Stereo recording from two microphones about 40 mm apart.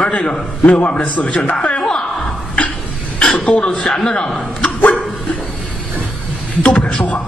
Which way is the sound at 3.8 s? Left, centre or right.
Centre.